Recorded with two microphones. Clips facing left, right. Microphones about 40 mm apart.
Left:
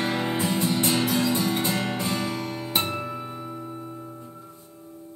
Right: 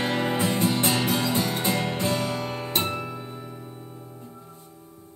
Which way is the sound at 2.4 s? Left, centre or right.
Right.